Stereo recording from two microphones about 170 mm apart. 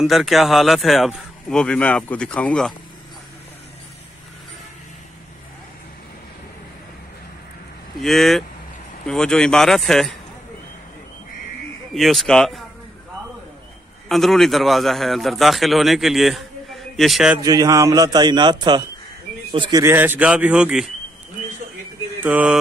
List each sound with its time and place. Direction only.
0.0 s a man's voice: centre (ahead or behind)
8.0 s a man's voice: centre (ahead or behind)
11.9 s a man's voice: centre (ahead or behind)
14.0 s a man's voice: centre (ahead or behind)
17.4 s a man's voice: 20° right (ahead or behind)
19.8 s a man's voice: 10° right (ahead or behind)
22.2 s a man's voice: 10° right (ahead or behind)